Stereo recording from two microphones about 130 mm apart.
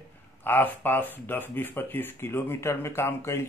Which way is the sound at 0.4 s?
15° left (ahead or behind).